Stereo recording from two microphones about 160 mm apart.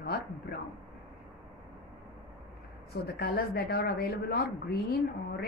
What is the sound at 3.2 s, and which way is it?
Speech, 65° left (ahead or behind).